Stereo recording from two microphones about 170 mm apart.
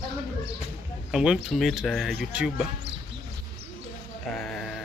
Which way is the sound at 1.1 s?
5° right (ahead or behind).